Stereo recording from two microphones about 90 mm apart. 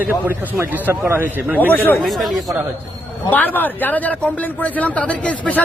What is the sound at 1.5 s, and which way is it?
Speech, 20° left (ahead or behind).